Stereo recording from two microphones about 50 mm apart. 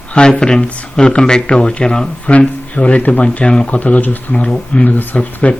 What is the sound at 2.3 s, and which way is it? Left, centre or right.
Speech, left.